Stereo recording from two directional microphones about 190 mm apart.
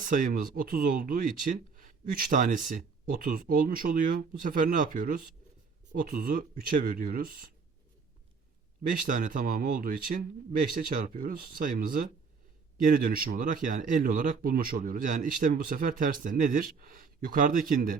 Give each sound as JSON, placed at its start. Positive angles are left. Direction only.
{"t": 0.0, "sound": "speech", "side_deg": -45}
{"t": 8.9, "sound": "speech", "side_deg": -45}